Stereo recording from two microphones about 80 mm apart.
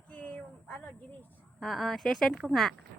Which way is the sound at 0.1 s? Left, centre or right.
Centre.